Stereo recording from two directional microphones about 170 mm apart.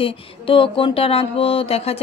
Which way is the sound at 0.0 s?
30° left (ahead or behind).